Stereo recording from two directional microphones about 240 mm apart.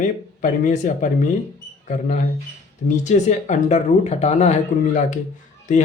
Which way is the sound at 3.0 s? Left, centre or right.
Left.